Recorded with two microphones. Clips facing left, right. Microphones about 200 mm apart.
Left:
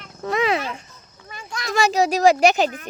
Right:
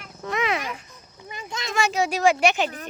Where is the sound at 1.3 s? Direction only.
20° right (ahead or behind).